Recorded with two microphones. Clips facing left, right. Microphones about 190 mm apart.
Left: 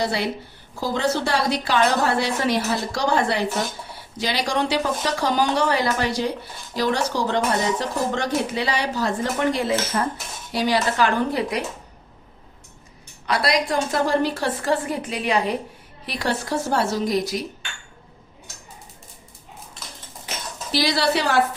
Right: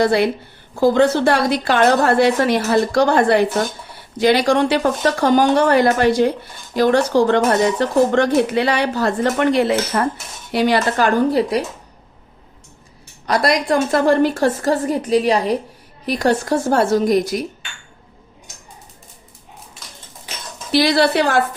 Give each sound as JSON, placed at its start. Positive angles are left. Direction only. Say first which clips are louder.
{"t": 0.0, "sound": "a woman's voice", "louder": "right 8 dB", "side_deg": -55}
{"t": 13.2, "sound": "a woman's voice", "louder": "right 5 dB", "side_deg": -45}
{"t": 20.7, "sound": "speech", "louder": "right 6 dB", "side_deg": -60}